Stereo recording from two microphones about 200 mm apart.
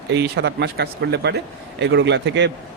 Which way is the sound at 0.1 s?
60° right (ahead or behind).